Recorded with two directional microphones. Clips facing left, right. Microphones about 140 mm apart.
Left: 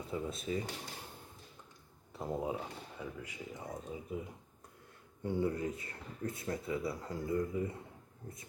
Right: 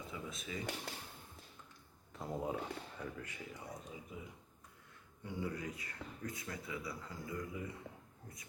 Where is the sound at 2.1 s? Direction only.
15° left (ahead or behind).